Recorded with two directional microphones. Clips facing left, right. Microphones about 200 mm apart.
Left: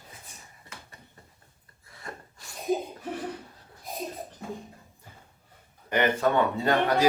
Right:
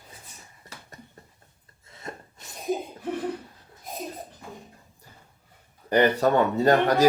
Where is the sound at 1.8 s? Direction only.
20° right (ahead or behind).